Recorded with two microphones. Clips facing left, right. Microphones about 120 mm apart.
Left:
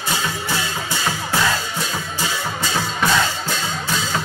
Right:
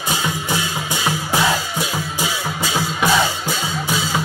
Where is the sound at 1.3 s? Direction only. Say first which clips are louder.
Right 2 dB; 10° right (ahead or behind).